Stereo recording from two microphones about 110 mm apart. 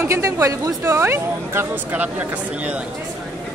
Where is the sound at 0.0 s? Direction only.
25° right (ahead or behind).